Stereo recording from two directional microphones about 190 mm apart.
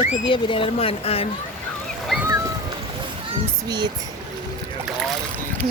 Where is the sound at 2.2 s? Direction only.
15° right (ahead or behind).